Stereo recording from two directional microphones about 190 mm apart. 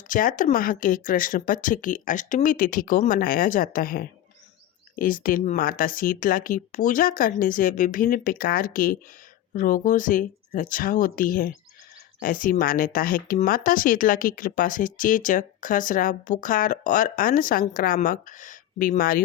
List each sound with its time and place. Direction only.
0.1 s speech: 45° left (ahead or behind)